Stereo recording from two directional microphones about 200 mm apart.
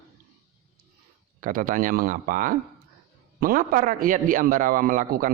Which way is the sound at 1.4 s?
40° right (ahead or behind).